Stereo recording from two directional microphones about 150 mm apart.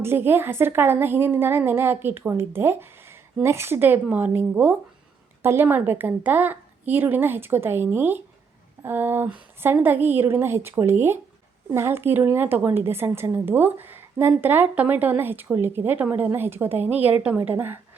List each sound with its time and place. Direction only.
0.0 s a woman's voice: 15° right (ahead or behind)